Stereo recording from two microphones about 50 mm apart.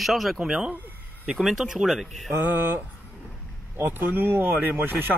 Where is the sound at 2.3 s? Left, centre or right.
Right.